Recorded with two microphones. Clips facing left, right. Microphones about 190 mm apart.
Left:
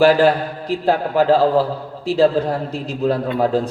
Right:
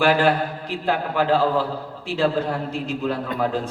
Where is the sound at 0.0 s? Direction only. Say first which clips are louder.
Left 5 dB; 35° left (ahead or behind).